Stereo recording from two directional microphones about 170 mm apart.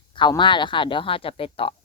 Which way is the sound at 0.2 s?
25° left (ahead or behind).